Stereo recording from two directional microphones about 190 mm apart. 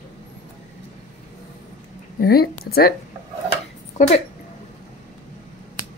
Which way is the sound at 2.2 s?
55° left (ahead or behind).